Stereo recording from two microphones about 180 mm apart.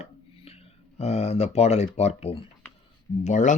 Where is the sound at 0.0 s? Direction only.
35° left (ahead or behind).